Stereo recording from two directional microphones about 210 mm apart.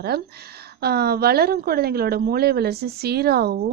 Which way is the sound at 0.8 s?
50° right (ahead or behind).